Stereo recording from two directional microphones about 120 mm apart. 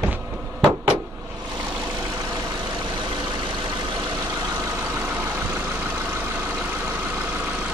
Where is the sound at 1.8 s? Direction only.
25° right (ahead or behind).